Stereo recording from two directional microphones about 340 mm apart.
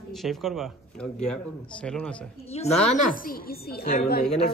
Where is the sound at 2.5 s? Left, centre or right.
Centre.